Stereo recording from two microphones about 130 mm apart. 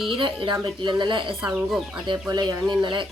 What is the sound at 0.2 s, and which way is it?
Speech, 40° right (ahead or behind).